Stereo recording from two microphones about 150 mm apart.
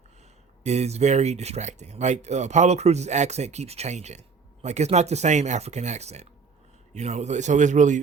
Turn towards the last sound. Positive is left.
turn(degrees=-55)  # may be behind; listen again after turning